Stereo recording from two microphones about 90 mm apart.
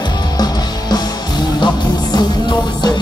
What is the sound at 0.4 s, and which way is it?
Music, 50° left (ahead or behind).